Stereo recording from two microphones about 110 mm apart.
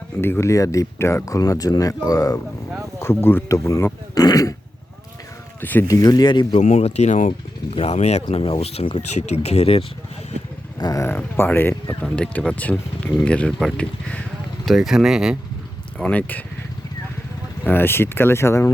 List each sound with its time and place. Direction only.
0.2 s speech: 25° left (ahead or behind)
3.0 s speech: 20° left (ahead or behind)
5.5 s speech: 15° left (ahead or behind)
5.9 s speech: 35° left (ahead or behind)
6.6 s speech: 85° left
7.8 s speech: 70° left (ahead or behind)
10.8 s speech: 40° left (ahead or behind)
11.0 s speech: 20° left (ahead or behind)
12.0 s speech: 10° left (ahead or behind)
14.6 s speech: centre (ahead or behind)
16.0 s speech: 10° left (ahead or behind)
17.6 s speech: 15° left (ahead or behind)